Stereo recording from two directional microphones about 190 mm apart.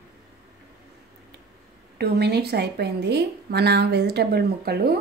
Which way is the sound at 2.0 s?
60° right (ahead or behind).